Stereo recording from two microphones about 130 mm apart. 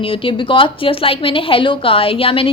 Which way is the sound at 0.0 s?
45° left (ahead or behind).